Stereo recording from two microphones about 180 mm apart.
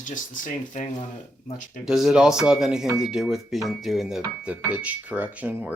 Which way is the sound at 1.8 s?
5° right (ahead or behind).